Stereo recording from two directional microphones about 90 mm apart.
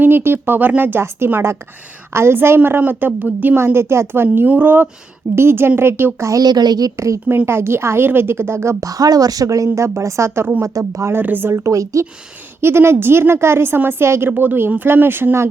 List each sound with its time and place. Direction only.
0.0 s a woman's voice: 25° right (ahead or behind)
8.8 s a woman's voice: 45° right (ahead or behind)
11.2 s a woman's voice: 20° right (ahead or behind)
11.5 s a woman's voice: 35° right (ahead or behind)
12.6 s a woman's voice: 30° right (ahead or behind)